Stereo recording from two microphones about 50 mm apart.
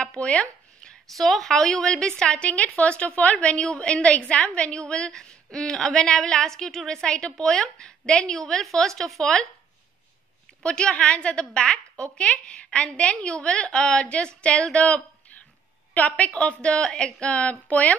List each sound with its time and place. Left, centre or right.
0.0 s chopping: left
0.8 s a woman's voice: centre
10.6 s a woman's voice: centre
16.3 s a woman's voice: left